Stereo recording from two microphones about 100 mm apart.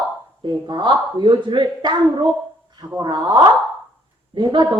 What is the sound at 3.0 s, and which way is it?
Speech, 50° right (ahead or behind).